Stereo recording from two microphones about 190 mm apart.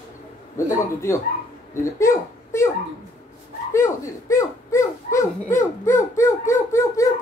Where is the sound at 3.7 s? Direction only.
15° left (ahead or behind).